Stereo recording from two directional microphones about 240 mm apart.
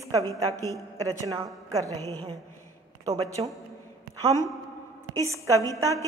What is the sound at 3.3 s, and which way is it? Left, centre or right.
A man's voice, centre.